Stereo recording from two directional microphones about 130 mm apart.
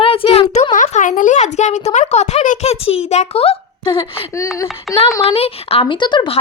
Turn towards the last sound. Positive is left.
turn(degrees=35)  # may be behind; listen again after turning